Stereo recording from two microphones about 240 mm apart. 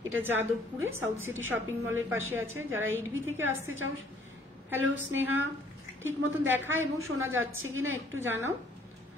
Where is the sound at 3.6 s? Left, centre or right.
Right.